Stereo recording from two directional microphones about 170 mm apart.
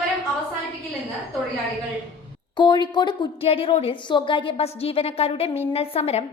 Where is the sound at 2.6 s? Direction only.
25° left (ahead or behind).